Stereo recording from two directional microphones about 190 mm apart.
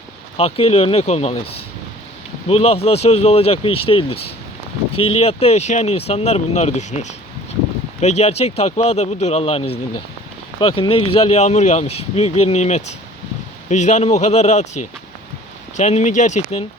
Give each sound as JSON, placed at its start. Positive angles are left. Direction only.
{"t": 0.3, "sound": "speech", "side_deg": 30}
{"t": 15.8, "sound": "speech", "side_deg": 40}